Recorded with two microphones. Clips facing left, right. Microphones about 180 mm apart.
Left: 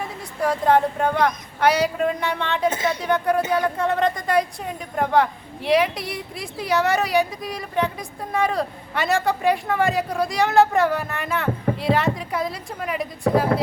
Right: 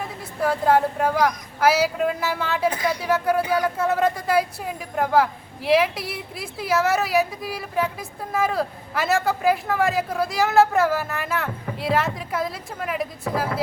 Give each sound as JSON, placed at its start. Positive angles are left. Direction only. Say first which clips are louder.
{"t": 0.0, "sound": "speech", "louder": "even", "side_deg": 0}
{"t": 2.6, "sound": "speech", "louder": "left 1 dB", "side_deg": 25}
{"t": 3.0, "sound": "speech", "louder": "even", "side_deg": -5}